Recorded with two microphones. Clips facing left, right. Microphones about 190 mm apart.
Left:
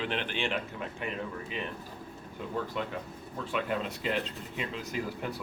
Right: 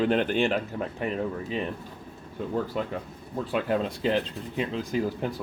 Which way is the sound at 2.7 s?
40° right (ahead or behind).